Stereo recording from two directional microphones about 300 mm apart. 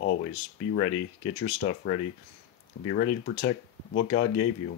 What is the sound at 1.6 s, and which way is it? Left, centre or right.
Speech, left.